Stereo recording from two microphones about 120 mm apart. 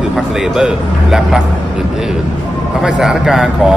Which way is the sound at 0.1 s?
5° right (ahead or behind).